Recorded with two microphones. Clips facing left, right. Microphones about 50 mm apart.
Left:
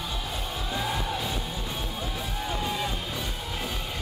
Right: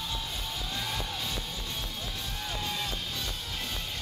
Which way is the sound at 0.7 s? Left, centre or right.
Centre.